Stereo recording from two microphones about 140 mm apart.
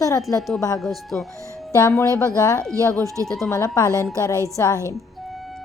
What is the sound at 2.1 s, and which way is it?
Speech, 25° left (ahead or behind).